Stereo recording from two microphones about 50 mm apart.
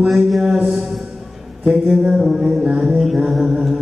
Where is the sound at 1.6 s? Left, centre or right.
Centre.